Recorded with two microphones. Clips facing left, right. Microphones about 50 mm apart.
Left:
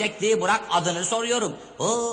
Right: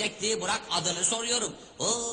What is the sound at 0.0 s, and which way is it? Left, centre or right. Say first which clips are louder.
A man's voice: left 9 dB; left.